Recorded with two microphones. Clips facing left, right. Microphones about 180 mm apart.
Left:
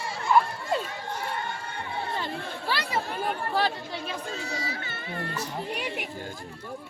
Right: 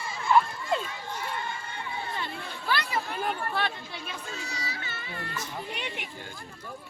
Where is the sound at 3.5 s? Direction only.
35° left (ahead or behind).